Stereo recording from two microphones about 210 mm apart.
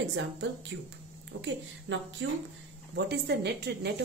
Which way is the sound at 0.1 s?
60° right (ahead or behind).